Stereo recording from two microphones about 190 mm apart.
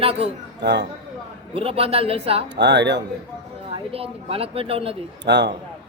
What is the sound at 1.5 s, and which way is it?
Speech, 30° right (ahead or behind).